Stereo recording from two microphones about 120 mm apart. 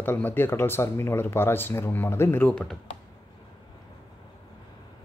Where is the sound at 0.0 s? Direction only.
15° left (ahead or behind).